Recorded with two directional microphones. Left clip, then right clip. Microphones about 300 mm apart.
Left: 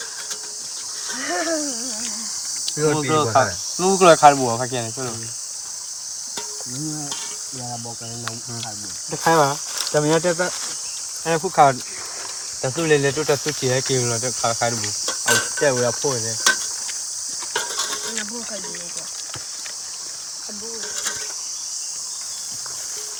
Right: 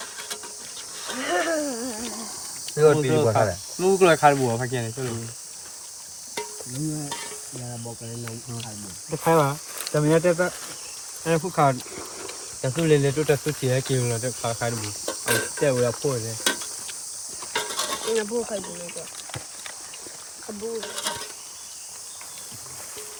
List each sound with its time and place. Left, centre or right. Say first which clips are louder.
1.2 s a sound: even; right
2.6 s speech: right 2 dB; left
9.1 s speech: left 4 dB; left